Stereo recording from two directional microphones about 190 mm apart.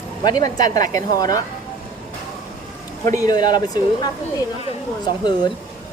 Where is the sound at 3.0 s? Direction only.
15° left (ahead or behind).